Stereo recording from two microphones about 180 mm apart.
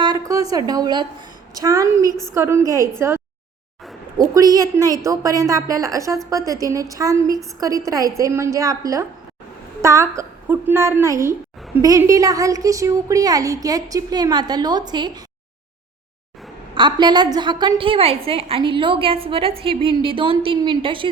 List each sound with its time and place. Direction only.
0.0 s a sound: 20° right (ahead or behind)
0.5 s a woman's voice: 20° right (ahead or behind)
4.2 s a woman's voice: 20° right (ahead or behind)
16.7 s a woman's voice: 25° right (ahead or behind)